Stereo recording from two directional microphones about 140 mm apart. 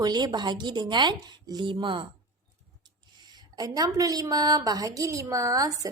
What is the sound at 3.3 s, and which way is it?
Speech, 30° right (ahead or behind).